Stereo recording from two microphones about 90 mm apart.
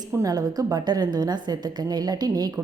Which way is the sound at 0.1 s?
40° right (ahead or behind).